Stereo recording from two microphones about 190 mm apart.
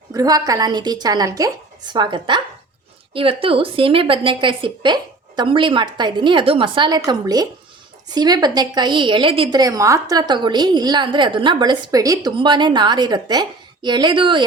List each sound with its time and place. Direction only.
0.1 s a woman's voice: 20° right (ahead or behind)